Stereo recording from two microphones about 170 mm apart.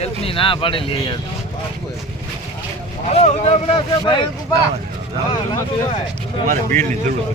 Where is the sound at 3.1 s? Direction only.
40° left (ahead or behind).